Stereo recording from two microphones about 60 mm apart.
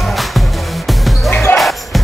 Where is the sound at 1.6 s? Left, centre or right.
Centre.